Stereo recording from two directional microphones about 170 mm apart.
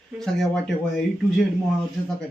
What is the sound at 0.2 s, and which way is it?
Speech, centre (ahead or behind).